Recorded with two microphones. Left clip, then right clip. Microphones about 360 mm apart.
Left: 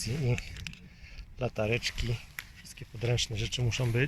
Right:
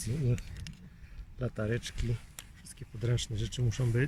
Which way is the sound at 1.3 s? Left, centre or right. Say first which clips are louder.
Left 5 dB; left.